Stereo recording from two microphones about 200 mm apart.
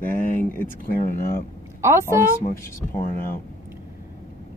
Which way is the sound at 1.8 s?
15° right (ahead or behind).